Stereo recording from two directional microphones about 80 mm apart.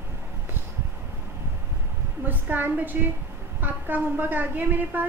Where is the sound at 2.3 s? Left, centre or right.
Right.